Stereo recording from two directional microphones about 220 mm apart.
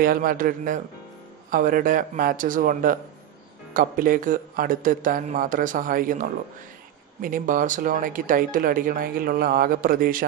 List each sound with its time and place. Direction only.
0.0 s speech: 40° right (ahead or behind)